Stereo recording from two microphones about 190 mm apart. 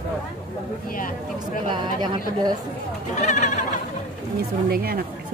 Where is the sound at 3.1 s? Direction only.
40° left (ahead or behind).